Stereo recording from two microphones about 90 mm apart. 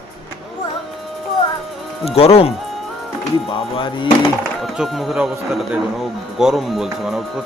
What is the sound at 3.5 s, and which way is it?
Music, 75° left (ahead or behind).